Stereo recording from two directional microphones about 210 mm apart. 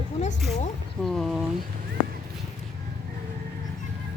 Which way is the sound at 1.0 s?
Centre (ahead or behind).